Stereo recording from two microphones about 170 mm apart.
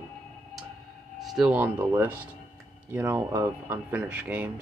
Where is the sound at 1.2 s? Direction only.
Centre (ahead or behind).